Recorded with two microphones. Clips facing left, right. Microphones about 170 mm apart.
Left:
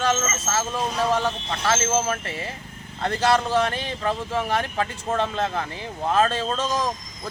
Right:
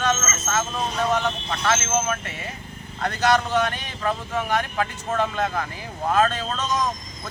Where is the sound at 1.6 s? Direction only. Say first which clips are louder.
Left 1 dB; 30° left (ahead or behind).